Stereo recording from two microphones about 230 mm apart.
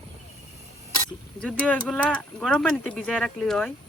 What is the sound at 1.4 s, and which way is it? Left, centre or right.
Speech, centre.